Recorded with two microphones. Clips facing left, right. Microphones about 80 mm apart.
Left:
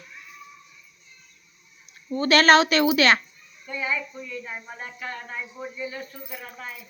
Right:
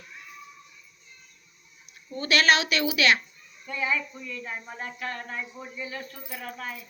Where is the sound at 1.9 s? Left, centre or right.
Left.